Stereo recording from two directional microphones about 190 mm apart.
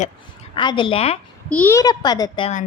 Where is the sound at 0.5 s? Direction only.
25° left (ahead or behind).